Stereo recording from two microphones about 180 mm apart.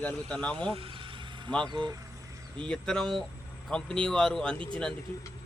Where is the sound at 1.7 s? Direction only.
25° right (ahead or behind).